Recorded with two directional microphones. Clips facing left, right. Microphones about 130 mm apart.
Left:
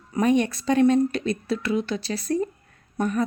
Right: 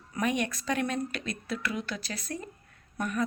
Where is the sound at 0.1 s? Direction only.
30° left (ahead or behind).